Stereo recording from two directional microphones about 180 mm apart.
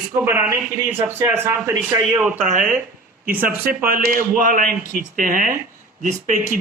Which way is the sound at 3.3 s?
10° right (ahead or behind).